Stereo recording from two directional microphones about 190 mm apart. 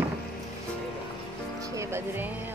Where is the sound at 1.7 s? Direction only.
15° right (ahead or behind).